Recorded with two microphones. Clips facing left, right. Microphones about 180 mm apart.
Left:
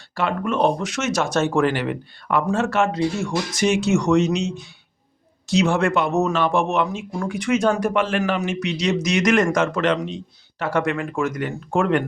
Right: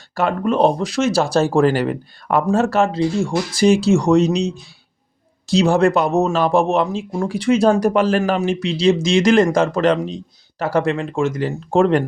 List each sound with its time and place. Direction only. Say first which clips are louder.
0.1 s speech: right 4 dB; 40° right (ahead or behind)